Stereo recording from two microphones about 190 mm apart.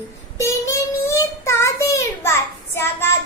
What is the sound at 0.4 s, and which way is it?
Child singing, 15° left (ahead or behind).